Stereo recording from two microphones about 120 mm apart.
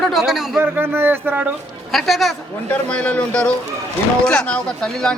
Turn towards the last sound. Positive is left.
turn(degrees=5)  # may be behind; listen again after turning